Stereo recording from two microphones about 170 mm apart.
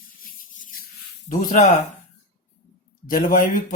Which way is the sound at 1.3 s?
45° left (ahead or behind).